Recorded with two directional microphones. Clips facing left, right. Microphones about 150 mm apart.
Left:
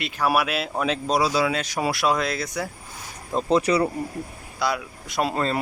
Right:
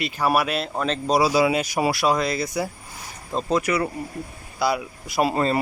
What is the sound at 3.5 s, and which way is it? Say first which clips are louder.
Speech: left 2 dB; 30° left (ahead or behind).